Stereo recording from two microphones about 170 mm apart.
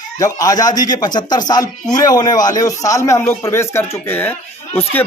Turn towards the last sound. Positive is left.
turn(degrees=10)  # may be behind; listen again after turning